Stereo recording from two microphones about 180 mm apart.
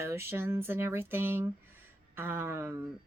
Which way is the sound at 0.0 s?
15° right (ahead or behind).